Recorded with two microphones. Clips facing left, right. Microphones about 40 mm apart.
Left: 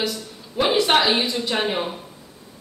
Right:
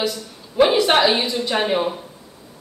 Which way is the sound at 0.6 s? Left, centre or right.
Centre.